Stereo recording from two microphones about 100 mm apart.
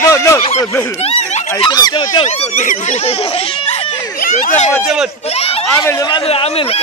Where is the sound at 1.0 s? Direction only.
85° left.